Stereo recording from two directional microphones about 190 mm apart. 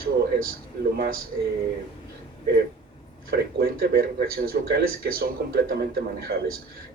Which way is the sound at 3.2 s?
50° right (ahead or behind).